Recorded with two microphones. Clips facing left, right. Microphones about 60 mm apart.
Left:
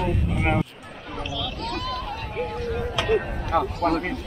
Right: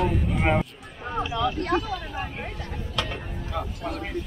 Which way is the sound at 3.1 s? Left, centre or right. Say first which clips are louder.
Left 12 dB; left.